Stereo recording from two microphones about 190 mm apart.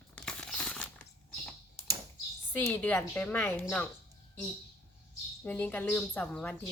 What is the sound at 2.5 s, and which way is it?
A woman's voice, 10° left (ahead or behind).